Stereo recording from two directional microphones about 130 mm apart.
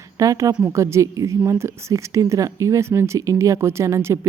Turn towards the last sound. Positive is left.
turn(degrees=-20)  # may be behind; listen again after turning